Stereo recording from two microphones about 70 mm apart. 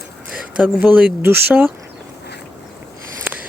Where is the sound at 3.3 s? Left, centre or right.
Right.